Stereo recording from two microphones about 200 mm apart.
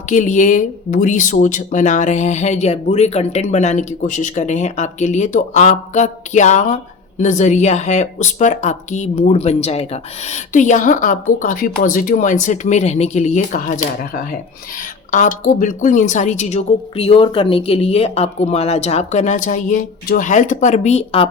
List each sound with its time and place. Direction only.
0.1 s speech: 40° left (ahead or behind)